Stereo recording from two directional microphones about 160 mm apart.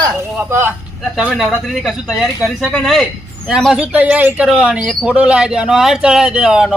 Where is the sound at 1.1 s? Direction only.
Centre (ahead or behind).